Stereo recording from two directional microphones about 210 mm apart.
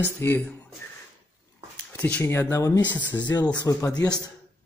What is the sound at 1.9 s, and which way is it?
Speech, 10° left (ahead or behind).